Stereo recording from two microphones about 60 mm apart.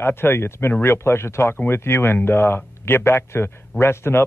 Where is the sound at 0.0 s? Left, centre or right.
Left.